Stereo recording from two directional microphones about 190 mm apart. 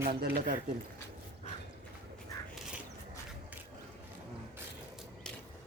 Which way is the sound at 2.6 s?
5° right (ahead or behind).